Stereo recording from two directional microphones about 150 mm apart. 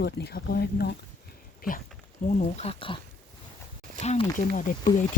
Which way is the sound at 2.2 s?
50° left (ahead or behind).